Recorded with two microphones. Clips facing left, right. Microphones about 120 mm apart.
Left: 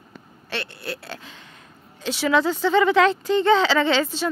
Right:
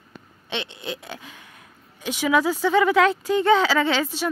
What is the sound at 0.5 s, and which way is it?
Speech, 20° right (ahead or behind).